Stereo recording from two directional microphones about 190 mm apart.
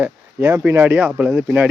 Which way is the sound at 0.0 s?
10° right (ahead or behind).